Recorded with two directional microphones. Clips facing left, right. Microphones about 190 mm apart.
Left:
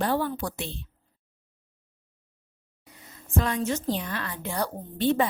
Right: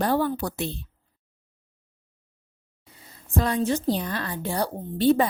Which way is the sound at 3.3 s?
35° right (ahead or behind).